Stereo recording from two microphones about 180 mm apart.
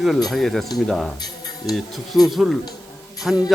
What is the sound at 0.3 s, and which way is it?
Speech, centre (ahead or behind).